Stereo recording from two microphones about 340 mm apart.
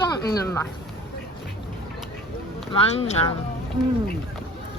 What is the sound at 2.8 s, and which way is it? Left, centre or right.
Speech, centre.